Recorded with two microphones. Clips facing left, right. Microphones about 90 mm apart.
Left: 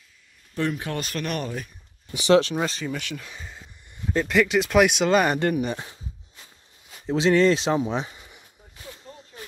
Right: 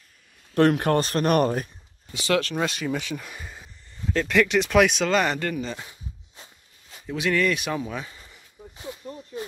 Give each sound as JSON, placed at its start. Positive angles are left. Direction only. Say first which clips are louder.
{"t": 0.6, "sound": "speech", "louder": "right 8 dB", "side_deg": -60}
{"t": 0.9, "sound": "speech", "louder": "right 8 dB", "side_deg": -40}
{"t": 2.1, "sound": "speech", "louder": "left 6 dB", "side_deg": 20}
{"t": 2.5, "sound": "speech", "louder": "right 1 dB", "side_deg": -5}
{"t": 4.0, "sound": "a sound", "louder": "left 1 dB", "side_deg": 15}
{"t": 4.3, "sound": "speech", "louder": "even", "side_deg": 5}
{"t": 7.1, "sound": "speech", "louder": "left 5 dB", "side_deg": 25}